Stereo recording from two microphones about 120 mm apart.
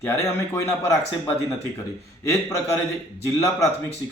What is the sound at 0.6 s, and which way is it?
A man's voice, 25° left (ahead or behind).